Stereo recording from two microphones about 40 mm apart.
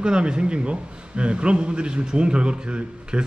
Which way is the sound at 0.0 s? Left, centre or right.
Right.